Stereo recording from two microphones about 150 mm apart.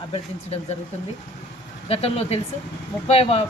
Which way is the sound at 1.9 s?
40° left (ahead or behind).